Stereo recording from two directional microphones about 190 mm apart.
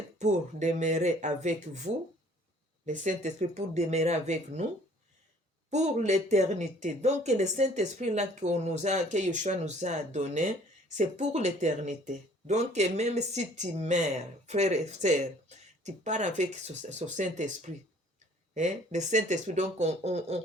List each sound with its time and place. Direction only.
0.2 s speech: 40° right (ahead or behind)
5.7 s speech: 40° right (ahead or behind)